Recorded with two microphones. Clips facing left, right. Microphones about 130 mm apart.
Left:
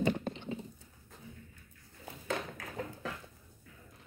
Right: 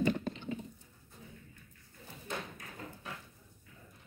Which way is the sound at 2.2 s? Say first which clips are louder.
Left 5 dB; 90° left.